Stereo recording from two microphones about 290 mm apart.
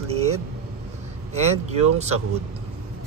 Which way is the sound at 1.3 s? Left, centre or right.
Right.